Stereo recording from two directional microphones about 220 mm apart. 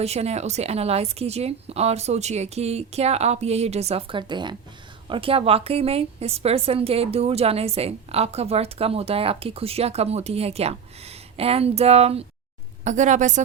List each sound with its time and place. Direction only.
0.0 s a woman's voice: 30° right (ahead or behind)